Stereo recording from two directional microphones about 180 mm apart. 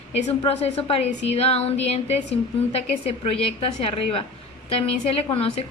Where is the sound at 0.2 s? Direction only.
35° left (ahead or behind).